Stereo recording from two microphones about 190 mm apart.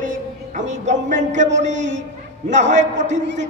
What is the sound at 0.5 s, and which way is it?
Music, 40° right (ahead or behind).